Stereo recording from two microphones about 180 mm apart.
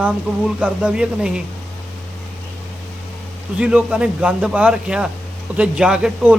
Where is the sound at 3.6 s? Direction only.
5° right (ahead or behind).